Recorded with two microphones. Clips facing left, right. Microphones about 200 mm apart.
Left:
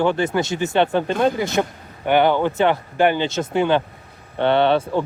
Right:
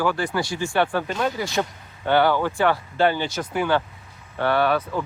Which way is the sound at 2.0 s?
20° left (ahead or behind).